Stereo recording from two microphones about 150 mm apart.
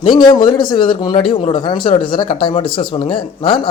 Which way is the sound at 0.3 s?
30° left (ahead or behind).